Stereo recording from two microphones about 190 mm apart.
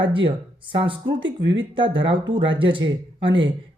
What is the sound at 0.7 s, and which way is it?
Speech, 25° right (ahead or behind).